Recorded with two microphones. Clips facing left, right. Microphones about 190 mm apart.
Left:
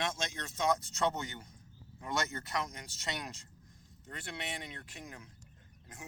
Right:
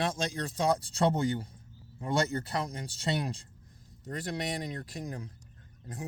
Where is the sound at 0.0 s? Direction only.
35° right (ahead or behind).